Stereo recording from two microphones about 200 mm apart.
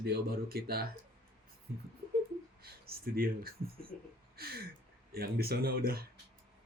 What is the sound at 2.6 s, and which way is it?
Speech, 50° right (ahead or behind).